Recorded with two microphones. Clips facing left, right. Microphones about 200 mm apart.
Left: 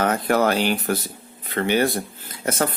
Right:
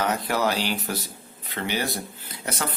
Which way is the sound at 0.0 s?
50° left (ahead or behind).